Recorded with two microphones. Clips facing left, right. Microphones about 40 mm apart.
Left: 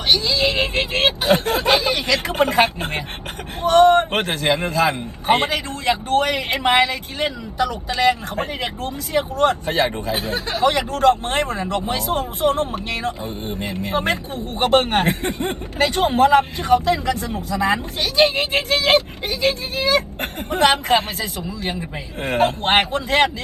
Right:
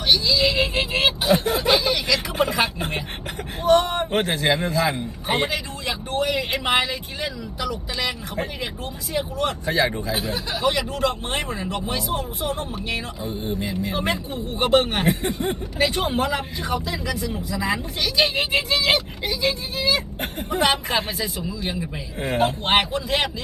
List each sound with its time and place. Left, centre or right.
0.1 s speech: left